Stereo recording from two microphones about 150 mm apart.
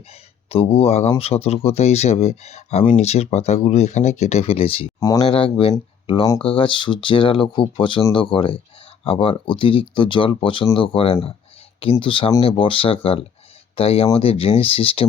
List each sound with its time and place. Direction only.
0.5 s speech: 40° left (ahead or behind)
4.9 s speech: 25° left (ahead or behind)
5.2 s speech: 35° left (ahead or behind)